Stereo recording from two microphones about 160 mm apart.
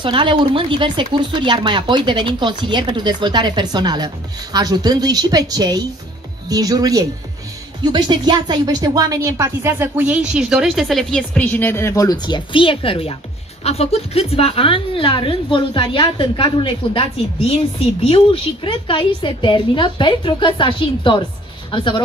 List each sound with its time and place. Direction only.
0.0 s a woman's voice: 30° right (ahead or behind); by 22.0 s 30° left (ahead or behind)